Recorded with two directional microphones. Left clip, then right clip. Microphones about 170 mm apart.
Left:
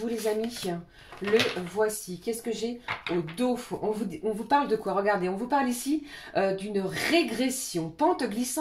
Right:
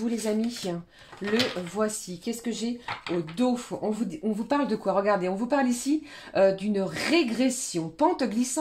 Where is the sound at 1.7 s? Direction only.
45° right (ahead or behind).